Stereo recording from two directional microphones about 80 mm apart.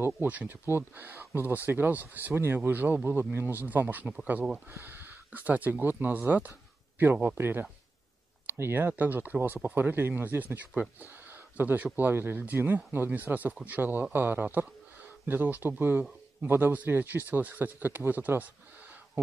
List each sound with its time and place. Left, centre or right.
0.0 s speech: right